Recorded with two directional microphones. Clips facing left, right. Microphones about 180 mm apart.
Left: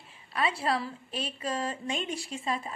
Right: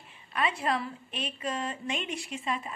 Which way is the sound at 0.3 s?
30° left (ahead or behind).